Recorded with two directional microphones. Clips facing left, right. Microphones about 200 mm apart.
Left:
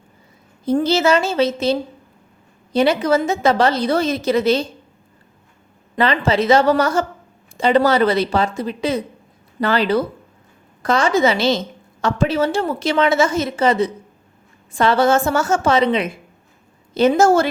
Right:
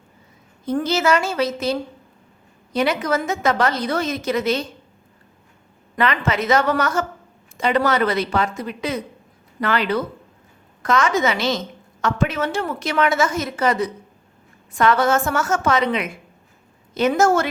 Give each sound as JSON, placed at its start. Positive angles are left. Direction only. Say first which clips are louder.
{"t": 0.6, "sound": "a woman's voice", "louder": "left 4 dB", "side_deg": 30}
{"t": 6.0, "sound": "a woman's voice", "louder": "left 4 dB", "side_deg": 30}